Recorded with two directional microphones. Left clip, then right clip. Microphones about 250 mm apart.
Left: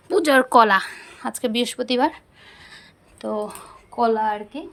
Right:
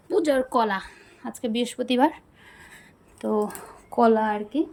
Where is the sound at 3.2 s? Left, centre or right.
Centre.